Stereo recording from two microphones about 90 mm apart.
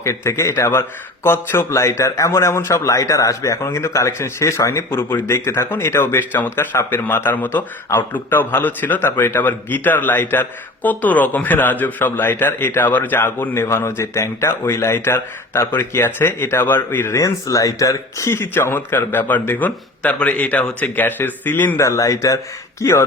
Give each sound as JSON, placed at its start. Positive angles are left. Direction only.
{"t": 0.0, "sound": "speech", "side_deg": 30}
{"t": 21.8, "sound": "speech", "side_deg": 35}